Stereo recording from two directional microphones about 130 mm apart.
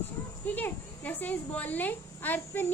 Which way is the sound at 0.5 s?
15° left (ahead or behind).